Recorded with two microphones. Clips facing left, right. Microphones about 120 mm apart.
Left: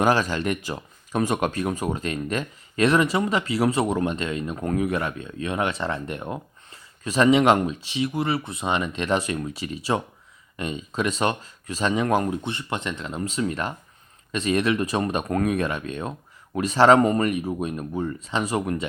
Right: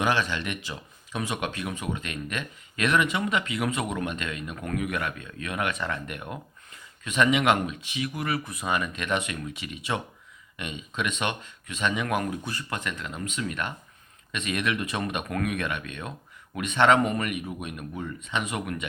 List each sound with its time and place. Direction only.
0.0 s speech: 40° left (ahead or behind)